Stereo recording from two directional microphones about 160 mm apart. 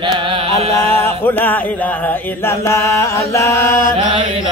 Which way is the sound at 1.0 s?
10° left (ahead or behind).